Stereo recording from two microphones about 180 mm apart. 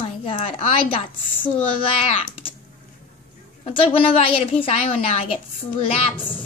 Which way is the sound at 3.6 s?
30° left (ahead or behind).